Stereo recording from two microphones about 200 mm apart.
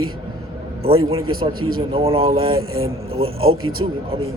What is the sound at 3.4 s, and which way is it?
Speech, 90° right.